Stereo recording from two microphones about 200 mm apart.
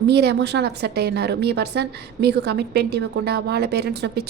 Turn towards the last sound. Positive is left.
turn(degrees=-55)  # may be behind; listen again after turning